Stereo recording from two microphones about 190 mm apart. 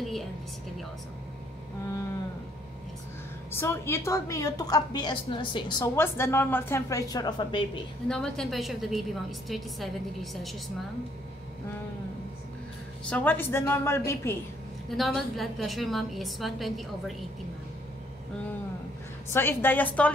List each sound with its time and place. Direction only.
0.0 s a sound: centre (ahead or behind)
3.5 s a woman's voice: 15° left (ahead or behind)
8.1 s a woman's voice: centre (ahead or behind)
13.1 s a woman's voice: 10° left (ahead or behind)
14.9 s a woman's voice: centre (ahead or behind)
19.3 s a woman's voice: 10° left (ahead or behind)